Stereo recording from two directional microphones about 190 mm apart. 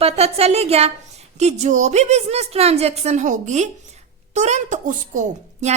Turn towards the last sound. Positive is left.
turn(degrees=-40)  # may be behind; listen again after turning